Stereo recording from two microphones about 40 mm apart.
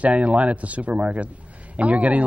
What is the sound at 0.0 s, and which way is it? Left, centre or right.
Speech, right.